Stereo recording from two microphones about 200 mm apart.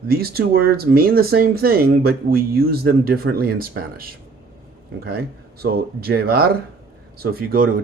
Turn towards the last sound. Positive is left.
turn(degrees=-45)  # may be behind; listen again after turning